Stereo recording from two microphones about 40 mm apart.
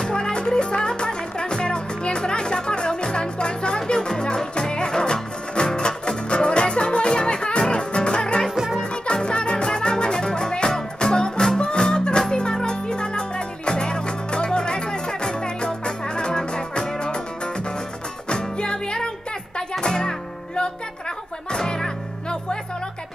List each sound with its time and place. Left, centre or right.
0.0 s music: left
18.3 s music: left